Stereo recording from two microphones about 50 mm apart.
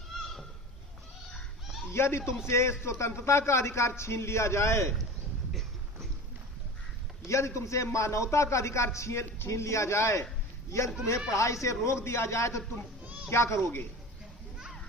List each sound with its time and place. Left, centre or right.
1.9 s a man's voice: left
7.3 s a man's voice: left
10.7 s a man's voice: left
13.3 s speech: left